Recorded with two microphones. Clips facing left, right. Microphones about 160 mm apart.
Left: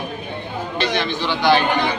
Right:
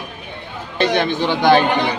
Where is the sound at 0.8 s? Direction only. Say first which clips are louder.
Right 6 dB; 50° right (ahead or behind).